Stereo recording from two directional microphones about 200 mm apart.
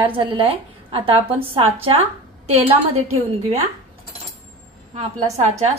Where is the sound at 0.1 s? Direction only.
25° right (ahead or behind).